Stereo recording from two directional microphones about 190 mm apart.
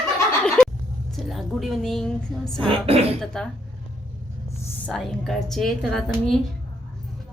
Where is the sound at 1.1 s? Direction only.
Centre (ahead or behind).